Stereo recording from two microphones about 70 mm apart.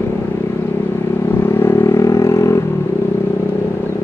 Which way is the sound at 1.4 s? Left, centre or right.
Left.